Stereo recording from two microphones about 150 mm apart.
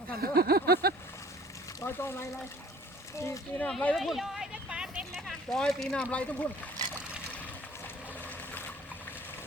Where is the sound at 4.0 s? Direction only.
Centre (ahead or behind).